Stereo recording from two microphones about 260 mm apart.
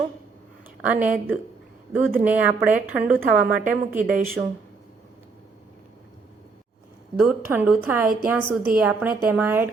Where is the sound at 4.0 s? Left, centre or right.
Right.